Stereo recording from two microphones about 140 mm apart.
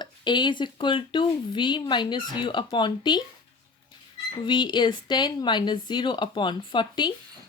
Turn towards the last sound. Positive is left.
turn(degrees=35)  # may be behind; listen again after turning